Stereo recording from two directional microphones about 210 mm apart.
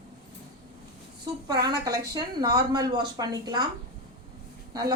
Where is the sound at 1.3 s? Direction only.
20° right (ahead or behind).